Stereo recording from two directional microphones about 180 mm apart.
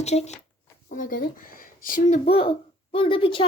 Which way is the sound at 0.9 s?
50° left (ahead or behind).